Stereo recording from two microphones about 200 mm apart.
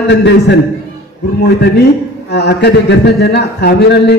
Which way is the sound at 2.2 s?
55° left (ahead or behind).